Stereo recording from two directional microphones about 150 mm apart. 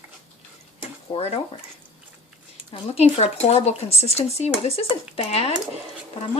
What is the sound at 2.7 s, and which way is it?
Speech, 40° left (ahead or behind).